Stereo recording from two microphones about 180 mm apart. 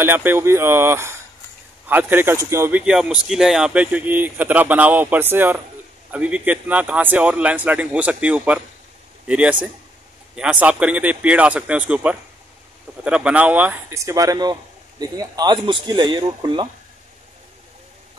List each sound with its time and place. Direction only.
0.0 s speech: 10° right (ahead or behind)
2.8 s speech: 5° right (ahead or behind); by 16.6 s 25° right (ahead or behind)